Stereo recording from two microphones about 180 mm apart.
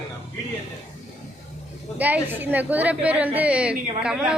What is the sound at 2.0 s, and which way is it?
A woman's voice, 10° right (ahead or behind).